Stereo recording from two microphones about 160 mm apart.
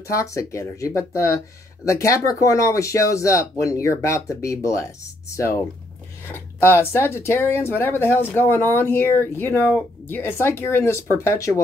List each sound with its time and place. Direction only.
0.1 s speech: 20° left (ahead or behind)
6.8 s speech: 15° left (ahead or behind)